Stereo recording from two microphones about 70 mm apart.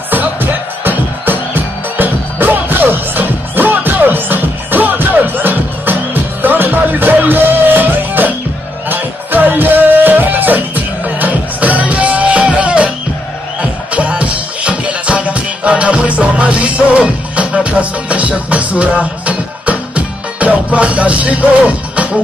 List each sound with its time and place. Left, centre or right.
0.1 s music: right